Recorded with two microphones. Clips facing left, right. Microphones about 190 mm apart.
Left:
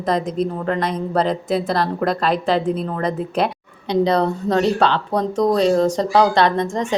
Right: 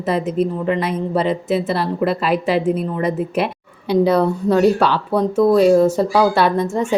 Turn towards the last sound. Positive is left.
turn(degrees=-5)  # may be behind; listen again after turning